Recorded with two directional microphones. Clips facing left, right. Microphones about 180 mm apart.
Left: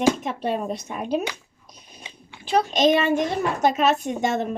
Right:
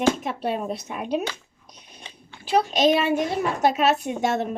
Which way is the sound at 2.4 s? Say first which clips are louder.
Even; 5° right (ahead or behind).